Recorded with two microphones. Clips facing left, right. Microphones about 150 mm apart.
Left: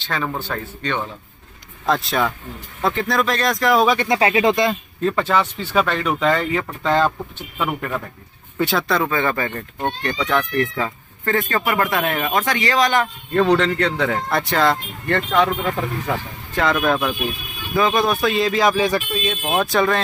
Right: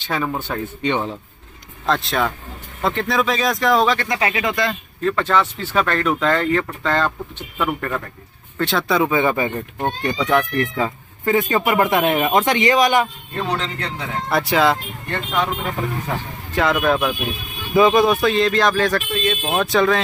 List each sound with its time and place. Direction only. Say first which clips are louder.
0.0 s speech: right 2 dB; 10° right (ahead or behind)
1.9 s speech: even; 5° left (ahead or behind)
4.1 s speech: left 5 dB; 30° left (ahead or behind)
5.2 s speech: right 1 dB; 5° left (ahead or behind)
8.8 s speech: right 3 dB; 10° right (ahead or behind)
13.4 s speech: left 8 dB; 75° left (ahead or behind)
14.3 s speech: right 4 dB; 5° right (ahead or behind)
15.0 s speech: left 5 dB; 70° left (ahead or behind)
16.5 s speech: right 1 dB; centre (ahead or behind)